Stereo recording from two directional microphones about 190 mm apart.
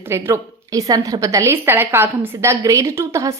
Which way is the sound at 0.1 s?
15° right (ahead or behind).